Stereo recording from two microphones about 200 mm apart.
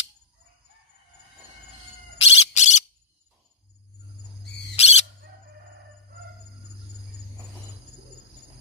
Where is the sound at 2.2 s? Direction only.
35° left (ahead or behind).